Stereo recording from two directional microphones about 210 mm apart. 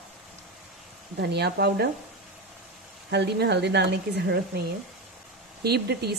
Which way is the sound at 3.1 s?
50° right (ahead or behind).